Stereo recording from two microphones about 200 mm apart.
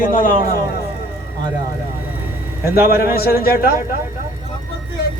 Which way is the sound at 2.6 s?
50° left (ahead or behind).